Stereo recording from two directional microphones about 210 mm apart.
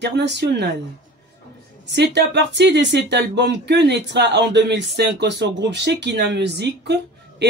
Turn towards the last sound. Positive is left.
turn(degrees=-55)  # may be behind; listen again after turning